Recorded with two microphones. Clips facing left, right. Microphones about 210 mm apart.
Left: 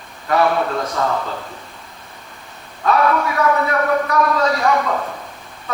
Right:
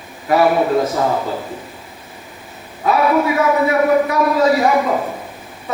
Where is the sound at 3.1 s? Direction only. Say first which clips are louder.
Right 3 dB; 20° right (ahead or behind).